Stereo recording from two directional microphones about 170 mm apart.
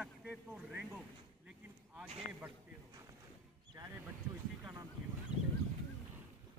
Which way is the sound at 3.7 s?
15° right (ahead or behind).